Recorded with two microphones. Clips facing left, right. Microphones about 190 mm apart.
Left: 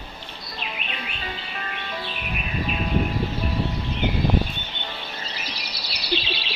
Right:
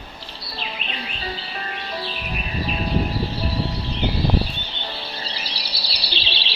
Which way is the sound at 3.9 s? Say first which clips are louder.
Right 1 dB; 35° right (ahead or behind).